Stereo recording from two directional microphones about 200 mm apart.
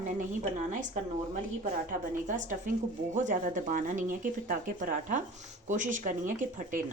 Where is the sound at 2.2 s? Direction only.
40° right (ahead or behind).